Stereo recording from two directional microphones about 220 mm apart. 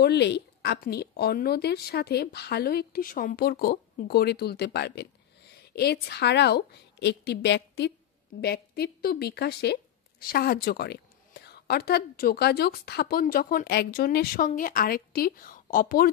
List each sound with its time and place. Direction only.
0.0 s a woman's voice: 50° left (ahead or behind)